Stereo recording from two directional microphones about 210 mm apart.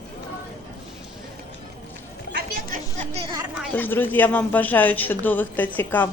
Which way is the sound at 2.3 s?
45° right (ahead or behind).